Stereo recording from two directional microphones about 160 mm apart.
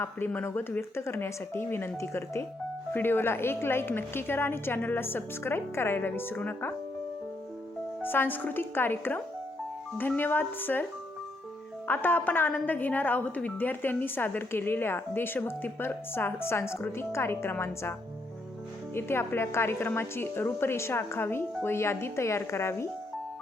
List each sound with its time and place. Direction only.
0.0 s a woman's voice: 15° left (ahead or behind)
8.0 s a woman's voice: 15° left (ahead or behind)
11.9 s a woman's voice: 10° left (ahead or behind)
18.9 s a woman's voice: 15° left (ahead or behind)